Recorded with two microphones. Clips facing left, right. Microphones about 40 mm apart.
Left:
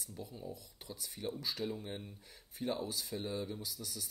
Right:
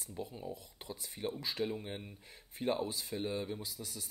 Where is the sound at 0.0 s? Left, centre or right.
Right.